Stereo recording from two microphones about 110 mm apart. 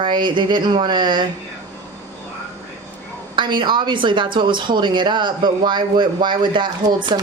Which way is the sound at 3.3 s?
45° right (ahead or behind).